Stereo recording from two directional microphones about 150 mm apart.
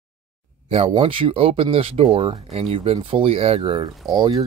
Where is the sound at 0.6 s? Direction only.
40° right (ahead or behind).